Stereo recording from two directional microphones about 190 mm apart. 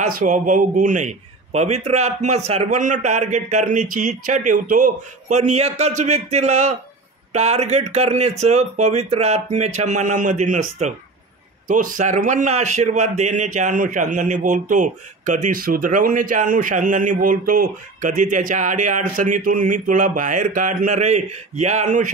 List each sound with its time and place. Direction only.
0.0 s a man's voice: 40° right (ahead or behind)